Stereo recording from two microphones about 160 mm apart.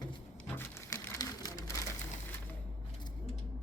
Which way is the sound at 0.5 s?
15° left (ahead or behind).